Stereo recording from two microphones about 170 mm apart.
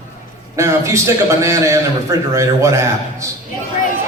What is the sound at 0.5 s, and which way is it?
A man's voice, 15° right (ahead or behind).